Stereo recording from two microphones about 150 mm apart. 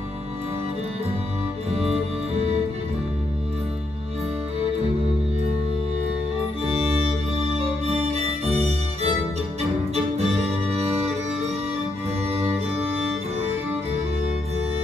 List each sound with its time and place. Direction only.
7.3 s music: 45° right (ahead or behind)
10.1 s music: 45° right (ahead or behind)